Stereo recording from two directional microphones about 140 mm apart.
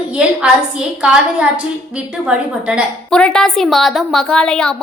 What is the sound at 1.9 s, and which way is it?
Speech, 5° right (ahead or behind).